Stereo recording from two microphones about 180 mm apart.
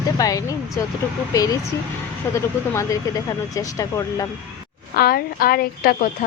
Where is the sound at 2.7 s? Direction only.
15° left (ahead or behind).